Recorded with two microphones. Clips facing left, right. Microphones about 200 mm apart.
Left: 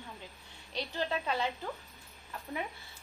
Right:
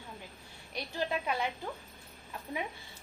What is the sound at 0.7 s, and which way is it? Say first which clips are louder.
Speech: even; 15° right (ahead or behind).